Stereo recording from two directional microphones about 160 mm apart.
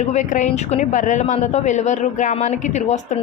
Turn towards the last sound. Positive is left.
turn(degrees=45)  # may be behind; listen again after turning